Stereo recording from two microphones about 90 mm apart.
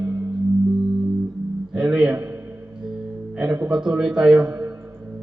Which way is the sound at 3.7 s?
5° right (ahead or behind).